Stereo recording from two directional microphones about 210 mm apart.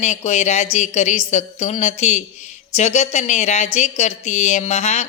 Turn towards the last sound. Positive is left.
turn(degrees=30)  # may be behind; listen again after turning